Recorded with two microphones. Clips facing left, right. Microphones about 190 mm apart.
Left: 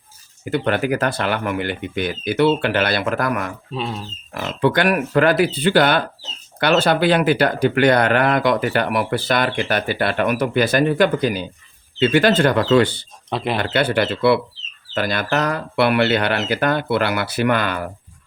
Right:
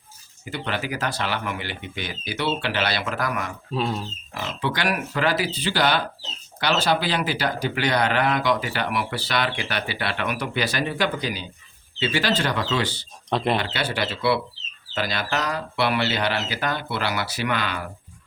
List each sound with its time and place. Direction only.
0.4 s speech: 55° left (ahead or behind)
3.7 s speech: centre (ahead or behind)
4.4 s speech: 55° left (ahead or behind)
13.3 s speech: 5° left (ahead or behind)
13.6 s speech: 55° left (ahead or behind)